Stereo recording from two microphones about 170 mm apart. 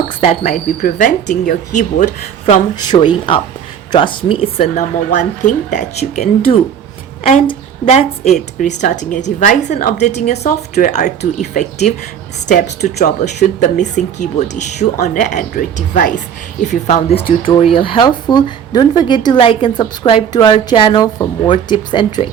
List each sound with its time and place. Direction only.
0.2 s speech: 40° left (ahead or behind)
2.7 s a woman's voice: 25° left (ahead or behind)